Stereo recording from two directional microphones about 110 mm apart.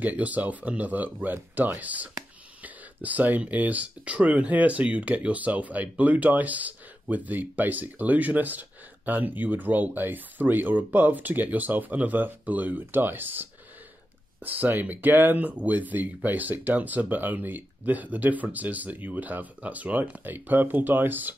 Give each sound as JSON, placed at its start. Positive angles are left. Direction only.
{"t": 0.0, "sound": "speech", "side_deg": -15}